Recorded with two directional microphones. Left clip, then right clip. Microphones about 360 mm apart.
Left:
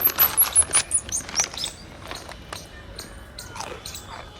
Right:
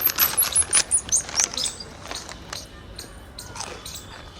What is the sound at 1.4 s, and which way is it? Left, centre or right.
Chirp, centre.